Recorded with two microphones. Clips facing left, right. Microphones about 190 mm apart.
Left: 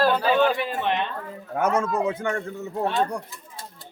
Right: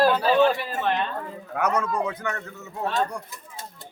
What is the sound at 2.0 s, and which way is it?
Speech, 25° left (ahead or behind).